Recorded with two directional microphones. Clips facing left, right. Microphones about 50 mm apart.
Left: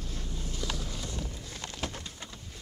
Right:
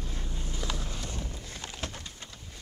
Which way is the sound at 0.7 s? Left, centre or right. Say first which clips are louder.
Even; right.